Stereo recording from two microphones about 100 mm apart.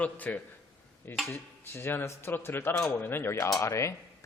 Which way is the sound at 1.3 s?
25° left (ahead or behind).